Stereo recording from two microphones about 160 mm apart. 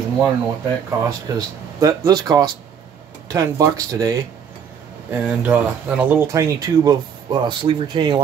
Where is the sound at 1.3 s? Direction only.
20° right (ahead or behind).